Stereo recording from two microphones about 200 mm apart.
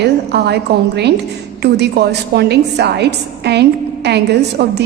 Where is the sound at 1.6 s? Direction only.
55° right (ahead or behind).